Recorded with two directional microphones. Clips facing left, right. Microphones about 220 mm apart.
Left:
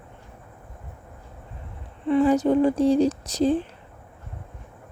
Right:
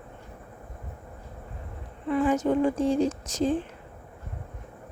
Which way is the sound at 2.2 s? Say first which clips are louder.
Left 4 dB; 35° left (ahead or behind).